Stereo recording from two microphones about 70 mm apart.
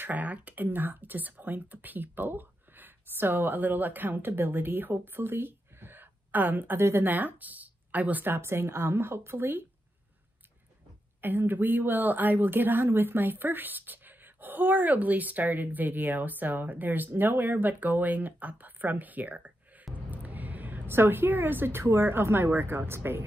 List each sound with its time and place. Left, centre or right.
0.0 s speech: right
11.1 s a woman's voice: right